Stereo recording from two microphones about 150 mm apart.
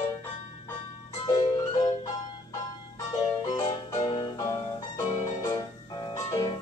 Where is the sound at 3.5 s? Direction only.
25° left (ahead or behind).